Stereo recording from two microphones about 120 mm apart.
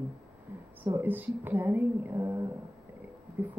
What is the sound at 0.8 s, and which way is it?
Speech, 20° right (ahead or behind).